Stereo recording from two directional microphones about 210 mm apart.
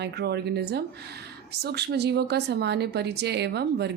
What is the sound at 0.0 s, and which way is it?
Speech, 50° right (ahead or behind).